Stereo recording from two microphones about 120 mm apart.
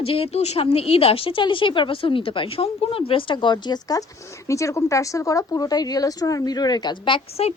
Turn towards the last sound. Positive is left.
turn(degrees=45)  # may be behind; listen again after turning